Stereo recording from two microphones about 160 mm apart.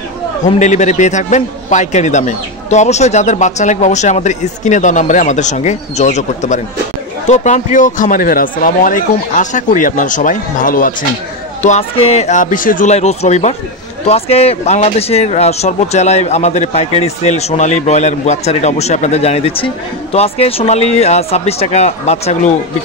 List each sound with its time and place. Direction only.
0.6 s speech: 50° left (ahead or behind)
11.6 s speech: 45° left (ahead or behind)